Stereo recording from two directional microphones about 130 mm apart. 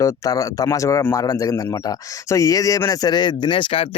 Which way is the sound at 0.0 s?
25° left (ahead or behind).